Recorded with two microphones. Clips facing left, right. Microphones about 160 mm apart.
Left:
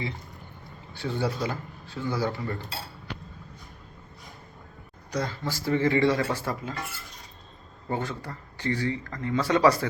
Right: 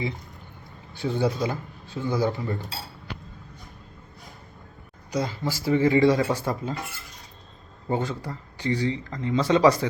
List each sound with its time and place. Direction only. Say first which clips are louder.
0.9 s speech: right 4 dB; 15° right (ahead or behind)
5.1 s speech: right 3 dB; 10° right (ahead or behind)
7.9 s speech: right 4 dB; 15° right (ahead or behind)